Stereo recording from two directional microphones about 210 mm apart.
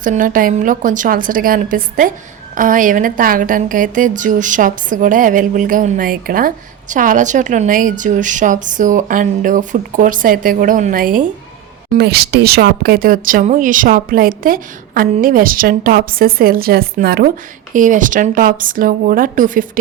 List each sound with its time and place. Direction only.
0.0 s a woman's voice: 40° right (ahead or behind)
11.9 s a woman's voice: 50° right (ahead or behind)